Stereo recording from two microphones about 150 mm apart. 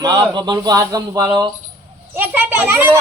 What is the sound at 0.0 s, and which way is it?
Speech, 25° right (ahead or behind).